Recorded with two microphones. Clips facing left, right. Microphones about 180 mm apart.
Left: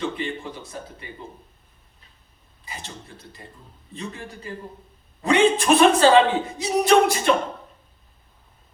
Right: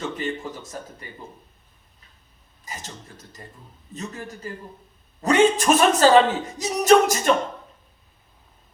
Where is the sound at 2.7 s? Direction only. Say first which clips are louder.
Right 1 dB; 40° right (ahead or behind).